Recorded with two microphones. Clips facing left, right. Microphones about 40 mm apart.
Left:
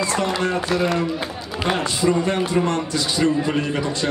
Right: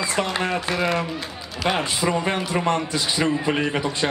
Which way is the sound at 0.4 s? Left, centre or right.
Right.